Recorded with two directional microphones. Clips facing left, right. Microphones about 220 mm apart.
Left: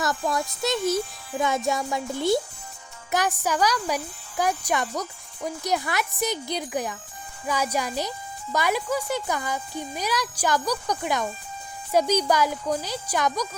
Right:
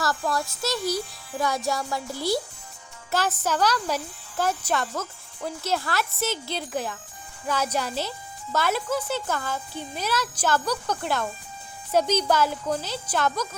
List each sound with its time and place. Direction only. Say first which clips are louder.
0.0 s a child's voice: left 1 dB; 20° left (ahead or behind)